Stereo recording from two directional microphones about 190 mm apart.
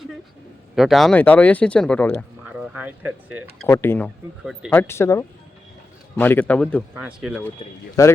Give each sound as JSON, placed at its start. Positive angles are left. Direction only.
{"t": 0.8, "sound": "speech", "side_deg": 0}
{"t": 2.5, "sound": "a sound", "side_deg": -10}
{"t": 3.7, "sound": "speech", "side_deg": 10}
{"t": 6.9, "sound": "speech", "side_deg": -5}
{"t": 8.0, "sound": "speech", "side_deg": 15}